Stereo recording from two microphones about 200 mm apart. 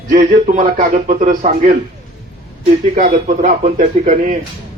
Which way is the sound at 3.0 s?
40° right (ahead or behind).